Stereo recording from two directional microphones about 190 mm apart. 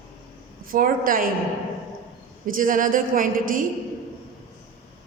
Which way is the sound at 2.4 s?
45° right (ahead or behind).